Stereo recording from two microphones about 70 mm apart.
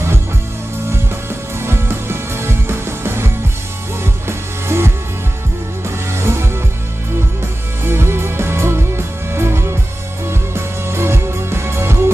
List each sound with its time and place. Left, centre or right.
1.6 s music: right
4.3 s music: right
7.8 s music: right